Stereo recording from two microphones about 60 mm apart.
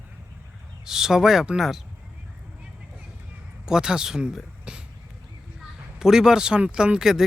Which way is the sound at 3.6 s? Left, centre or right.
Centre.